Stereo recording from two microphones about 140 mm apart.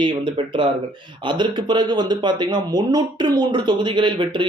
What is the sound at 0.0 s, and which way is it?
Speech, 35° right (ahead or behind).